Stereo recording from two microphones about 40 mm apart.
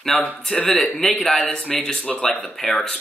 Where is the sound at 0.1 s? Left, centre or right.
Centre.